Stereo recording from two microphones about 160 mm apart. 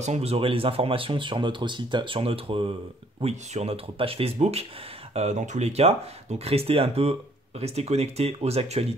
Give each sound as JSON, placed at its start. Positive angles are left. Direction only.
{"t": 0.0, "sound": "speech", "side_deg": -40}